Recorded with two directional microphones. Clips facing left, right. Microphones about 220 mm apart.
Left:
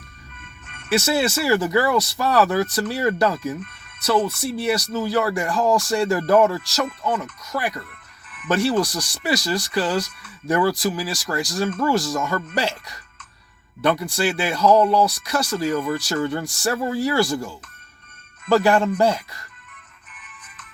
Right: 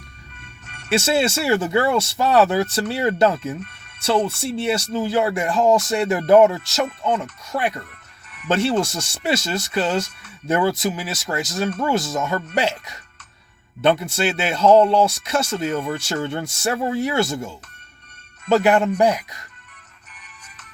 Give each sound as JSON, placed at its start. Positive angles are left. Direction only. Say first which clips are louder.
{"t": 0.3, "sound": "music", "louder": "right 1 dB", "side_deg": -40}
{"t": 0.9, "sound": "speech", "louder": "right 1 dB", "side_deg": -25}
{"t": 20.1, "sound": "music", "louder": "left 1 dB", "side_deg": -40}